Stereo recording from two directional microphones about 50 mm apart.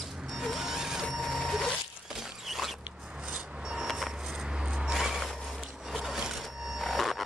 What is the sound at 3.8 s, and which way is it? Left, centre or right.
Vehicle, centre.